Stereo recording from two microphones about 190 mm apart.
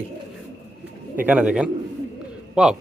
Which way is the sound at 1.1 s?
10° right (ahead or behind).